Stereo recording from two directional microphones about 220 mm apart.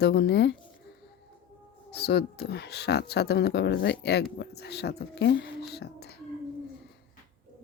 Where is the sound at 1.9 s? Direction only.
50° left (ahead or behind).